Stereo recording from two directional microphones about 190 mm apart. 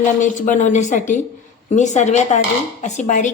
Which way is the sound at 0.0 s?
40° left (ahead or behind).